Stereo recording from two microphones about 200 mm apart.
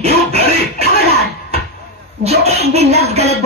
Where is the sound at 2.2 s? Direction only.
30° right (ahead or behind).